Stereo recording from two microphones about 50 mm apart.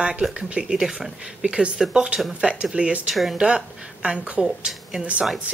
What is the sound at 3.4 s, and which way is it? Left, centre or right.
Speech, centre.